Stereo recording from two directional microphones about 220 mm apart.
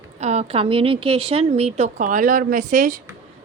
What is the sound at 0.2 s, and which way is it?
Speech, 30° right (ahead or behind).